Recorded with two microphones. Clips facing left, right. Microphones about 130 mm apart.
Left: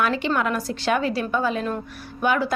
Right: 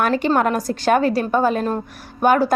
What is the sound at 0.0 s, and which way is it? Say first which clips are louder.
A woman's voice: right 5 dB; 45° right (ahead or behind).